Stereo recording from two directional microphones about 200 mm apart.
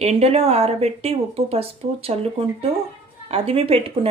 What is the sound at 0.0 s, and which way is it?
Speech, 30° right (ahead or behind).